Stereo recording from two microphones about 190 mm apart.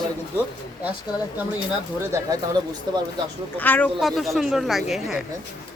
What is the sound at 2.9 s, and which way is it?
Speech, 20° right (ahead or behind).